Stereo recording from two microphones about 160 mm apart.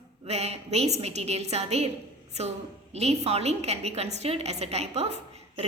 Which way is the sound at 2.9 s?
40° right (ahead or behind).